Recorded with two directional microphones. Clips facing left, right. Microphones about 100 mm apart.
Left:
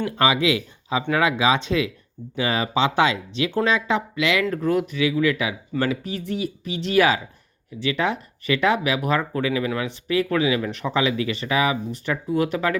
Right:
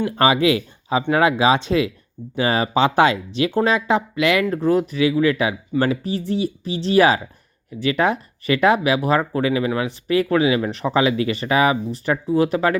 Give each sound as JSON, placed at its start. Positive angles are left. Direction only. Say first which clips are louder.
{"t": 0.2, "sound": "speech", "louder": "right 4 dB", "side_deg": -40}
{"t": 4.4, "sound": "speech", "louder": "right 3 dB", "side_deg": -30}
{"t": 7.8, "sound": "speech", "louder": "right 4 dB", "side_deg": -45}